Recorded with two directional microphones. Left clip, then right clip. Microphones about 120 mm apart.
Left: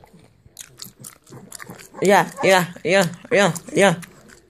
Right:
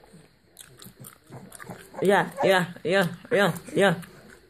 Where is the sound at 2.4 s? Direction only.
20° left (ahead or behind).